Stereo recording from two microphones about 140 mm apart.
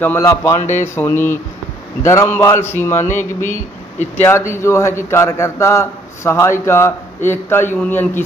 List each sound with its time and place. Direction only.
0.2 s a man's voice: 25° left (ahead or behind)